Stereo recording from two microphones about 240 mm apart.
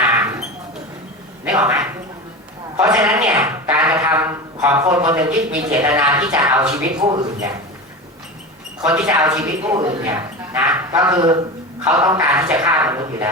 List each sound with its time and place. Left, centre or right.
0.0 s a sound: centre
1.5 s a man's voice: centre
5.0 s a man's voice: centre
8.9 s speech: centre
10.5 s speech: centre